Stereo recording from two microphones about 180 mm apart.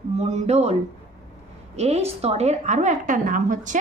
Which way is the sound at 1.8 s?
35° right (ahead or behind).